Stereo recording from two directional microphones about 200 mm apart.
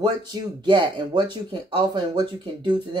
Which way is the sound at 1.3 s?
25° right (ahead or behind).